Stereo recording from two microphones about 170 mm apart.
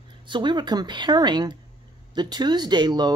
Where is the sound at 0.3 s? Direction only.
25° right (ahead or behind).